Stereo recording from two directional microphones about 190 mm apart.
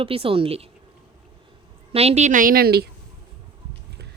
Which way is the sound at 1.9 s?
30° right (ahead or behind).